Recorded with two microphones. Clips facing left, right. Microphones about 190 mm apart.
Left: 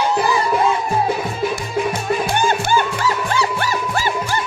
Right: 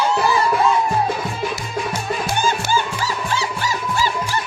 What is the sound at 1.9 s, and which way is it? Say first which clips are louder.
Music: left 4 dB; 55° left (ahead or behind).